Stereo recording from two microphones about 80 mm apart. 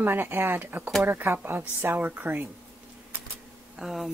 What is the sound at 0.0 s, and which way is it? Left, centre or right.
Speech, right.